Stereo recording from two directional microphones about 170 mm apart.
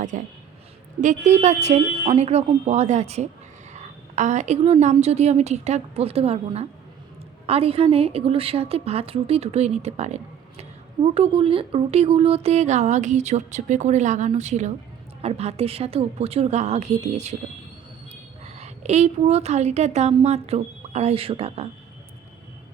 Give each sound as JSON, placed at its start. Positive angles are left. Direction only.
{"t": 0.1, "sound": "a woman's voice", "side_deg": -50}
{"t": 18.4, "sound": "a woman's voice", "side_deg": -40}